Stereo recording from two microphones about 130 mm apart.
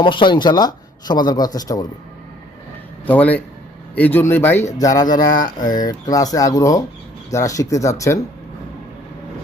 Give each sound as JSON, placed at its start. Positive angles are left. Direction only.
{"t": 0.0, "sound": "speech", "side_deg": 40}
{"t": 3.1, "sound": "speech", "side_deg": 10}
{"t": 4.8, "sound": "speech", "side_deg": 25}